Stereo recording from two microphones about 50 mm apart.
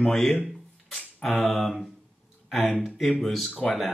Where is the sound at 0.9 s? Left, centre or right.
Centre.